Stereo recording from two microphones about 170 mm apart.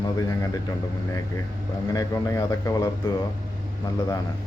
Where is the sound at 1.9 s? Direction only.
20° left (ahead or behind).